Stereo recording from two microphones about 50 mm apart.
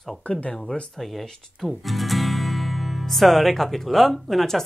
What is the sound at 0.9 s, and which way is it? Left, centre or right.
Speech, centre.